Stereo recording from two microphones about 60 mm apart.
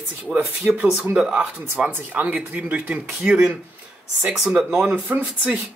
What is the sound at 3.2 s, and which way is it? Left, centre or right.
Speech, centre.